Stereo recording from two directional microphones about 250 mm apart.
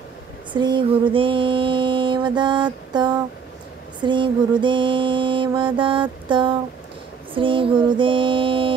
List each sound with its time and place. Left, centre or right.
0.5 s mantra: centre